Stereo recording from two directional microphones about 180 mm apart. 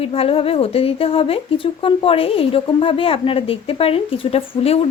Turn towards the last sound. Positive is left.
turn(degrees=35)  # may be behind; listen again after turning